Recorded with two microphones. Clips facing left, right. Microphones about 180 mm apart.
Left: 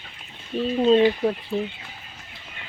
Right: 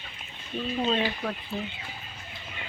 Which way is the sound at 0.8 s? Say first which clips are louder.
Left 11 dB; 25° left (ahead or behind).